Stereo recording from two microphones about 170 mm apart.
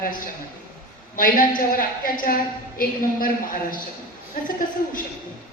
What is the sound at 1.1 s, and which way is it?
A woman's voice, 55° left (ahead or behind).